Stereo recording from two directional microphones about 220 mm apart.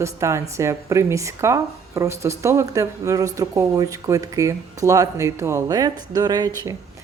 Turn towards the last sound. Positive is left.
turn(degrees=-15)  # may be behind; listen again after turning